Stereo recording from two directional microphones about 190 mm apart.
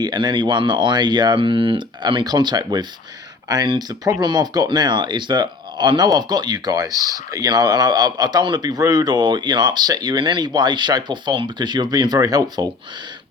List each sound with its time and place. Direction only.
0.0 s speech: 25° right (ahead or behind)